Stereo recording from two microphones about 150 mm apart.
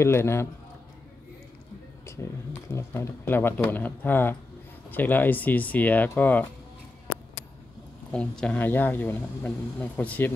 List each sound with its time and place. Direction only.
0.0 s speech: 15° left (ahead or behind)
2.2 s speech: 15° left (ahead or behind)
8.1 s speech: 5° left (ahead or behind)